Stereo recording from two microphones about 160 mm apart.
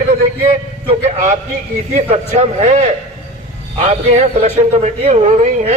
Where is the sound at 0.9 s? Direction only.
45° right (ahead or behind).